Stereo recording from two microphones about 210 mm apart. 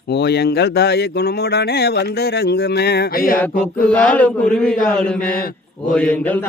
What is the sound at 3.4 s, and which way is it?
Speech, 5° left (ahead or behind).